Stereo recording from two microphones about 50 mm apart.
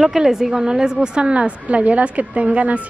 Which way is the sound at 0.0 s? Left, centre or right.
Centre.